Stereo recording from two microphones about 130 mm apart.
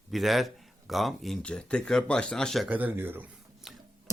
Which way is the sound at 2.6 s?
15° right (ahead or behind).